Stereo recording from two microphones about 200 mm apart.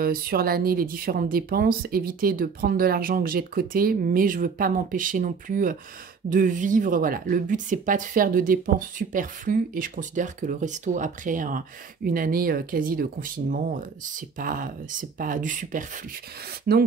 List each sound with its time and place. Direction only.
0.0 s a woman's voice: 50° right (ahead or behind)